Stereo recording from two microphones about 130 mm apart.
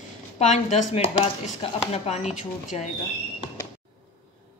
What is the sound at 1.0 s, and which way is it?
Speech, 50° left (ahead or behind).